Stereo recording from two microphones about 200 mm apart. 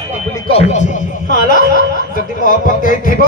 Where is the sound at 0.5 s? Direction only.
35° left (ahead or behind).